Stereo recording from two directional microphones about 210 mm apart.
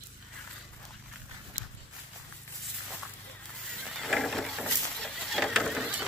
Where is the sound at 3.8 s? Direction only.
Centre (ahead or behind).